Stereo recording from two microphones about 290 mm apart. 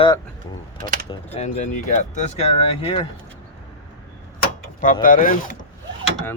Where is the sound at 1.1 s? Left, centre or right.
Left.